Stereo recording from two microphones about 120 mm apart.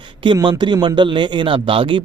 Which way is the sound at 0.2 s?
45° right (ahead or behind).